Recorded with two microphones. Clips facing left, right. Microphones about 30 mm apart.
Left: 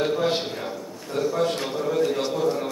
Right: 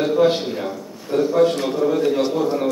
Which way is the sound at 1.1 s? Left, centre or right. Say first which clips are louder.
Right 7 dB; centre.